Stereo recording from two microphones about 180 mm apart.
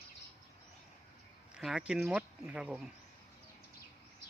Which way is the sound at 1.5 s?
5° right (ahead or behind).